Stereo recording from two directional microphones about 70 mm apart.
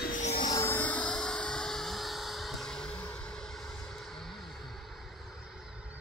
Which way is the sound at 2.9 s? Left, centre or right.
Left.